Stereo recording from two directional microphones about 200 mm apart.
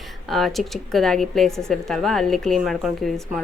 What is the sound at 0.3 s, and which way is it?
A woman's voice, centre (ahead or behind).